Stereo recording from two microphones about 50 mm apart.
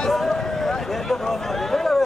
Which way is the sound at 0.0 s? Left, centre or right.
Centre.